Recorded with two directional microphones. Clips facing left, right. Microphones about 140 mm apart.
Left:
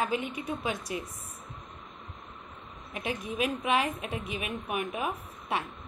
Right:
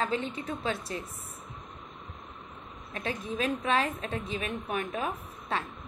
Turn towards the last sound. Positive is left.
turn(degrees=15)  # may be behind; listen again after turning